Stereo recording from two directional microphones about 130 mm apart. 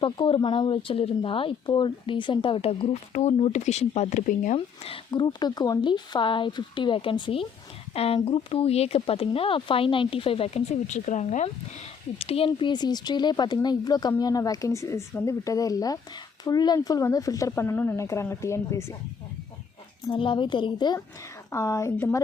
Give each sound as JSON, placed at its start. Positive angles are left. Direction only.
{"t": 0.0, "sound": "speech", "side_deg": 40}
{"t": 3.1, "sound": "speech", "side_deg": 60}
{"t": 4.5, "sound": "speech", "side_deg": 40}
{"t": 12.2, "sound": "speech", "side_deg": 45}
{"t": 20.1, "sound": "speech", "side_deg": 40}
{"t": 21.5, "sound": "speech", "side_deg": 25}